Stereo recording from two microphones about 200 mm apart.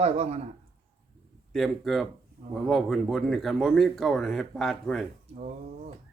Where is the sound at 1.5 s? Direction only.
Centre (ahead or behind).